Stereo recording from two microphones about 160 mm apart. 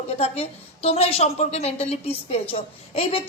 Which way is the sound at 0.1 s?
40° left (ahead or behind).